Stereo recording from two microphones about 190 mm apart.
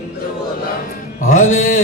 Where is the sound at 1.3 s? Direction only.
40° left (ahead or behind).